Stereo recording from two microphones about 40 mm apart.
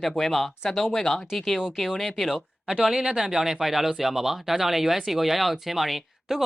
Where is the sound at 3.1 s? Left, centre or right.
Centre.